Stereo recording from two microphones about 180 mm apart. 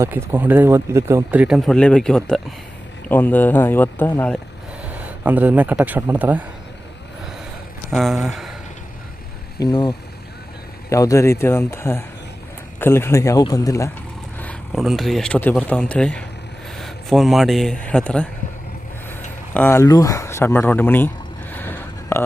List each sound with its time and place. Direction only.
0.0 s speech: 15° right (ahead or behind); by 4.4 s 10° left (ahead or behind)
4.9 s a man's voice: 10° right (ahead or behind)
7.9 s speech: centre (ahead or behind)
9.6 s speech: 25° left (ahead or behind)
14.3 s speech: 5° left (ahead or behind)
19.5 s speech: 10° left (ahead or behind)
21.5 s a sound: 10° left (ahead or behind)